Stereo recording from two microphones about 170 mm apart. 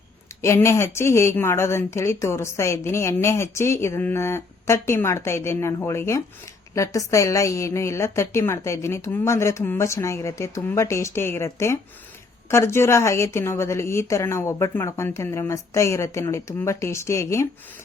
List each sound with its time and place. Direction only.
0.4 s speech: 15° left (ahead or behind)